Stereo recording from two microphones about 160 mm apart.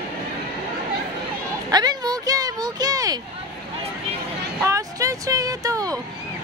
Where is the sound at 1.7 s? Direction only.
25° right (ahead or behind).